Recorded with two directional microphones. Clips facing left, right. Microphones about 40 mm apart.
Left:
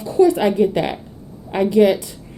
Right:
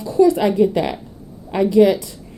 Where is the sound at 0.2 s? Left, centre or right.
Left.